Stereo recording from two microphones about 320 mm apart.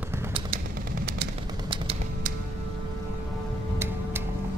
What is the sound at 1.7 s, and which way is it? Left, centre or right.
Typewriter, centre.